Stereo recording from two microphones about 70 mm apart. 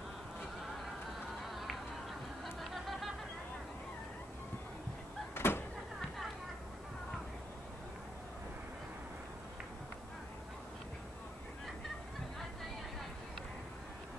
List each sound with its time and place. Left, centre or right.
2.4 s train: centre
5.3 s vehicle: left